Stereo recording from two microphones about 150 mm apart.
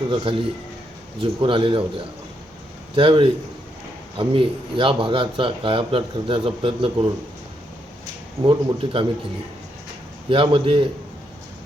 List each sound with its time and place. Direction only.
0.1 s speech: 35° right (ahead or behind)
2.9 s speech: 35° right (ahead or behind)
8.4 s speech: 35° right (ahead or behind)
10.2 s speech: 35° right (ahead or behind)